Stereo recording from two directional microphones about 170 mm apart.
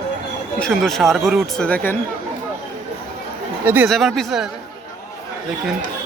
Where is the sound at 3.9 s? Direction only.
Centre (ahead or behind).